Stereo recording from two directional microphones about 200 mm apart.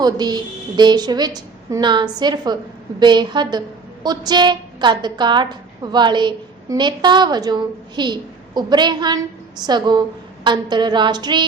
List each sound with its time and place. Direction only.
0.0 s a woman's voice: 20° right (ahead or behind)